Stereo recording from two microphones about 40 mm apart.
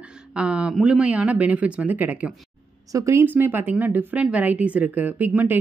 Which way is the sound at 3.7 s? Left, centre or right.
Right.